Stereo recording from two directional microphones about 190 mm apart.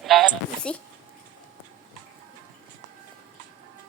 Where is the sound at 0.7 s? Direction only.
5° left (ahead or behind).